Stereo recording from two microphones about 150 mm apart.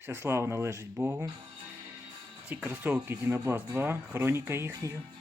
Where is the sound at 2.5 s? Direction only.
10° right (ahead or behind).